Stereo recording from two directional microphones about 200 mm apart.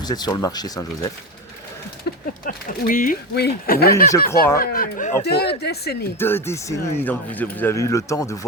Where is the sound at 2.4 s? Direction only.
45° left (ahead or behind).